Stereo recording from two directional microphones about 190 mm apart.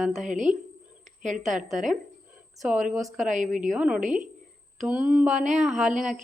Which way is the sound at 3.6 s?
5° right (ahead or behind).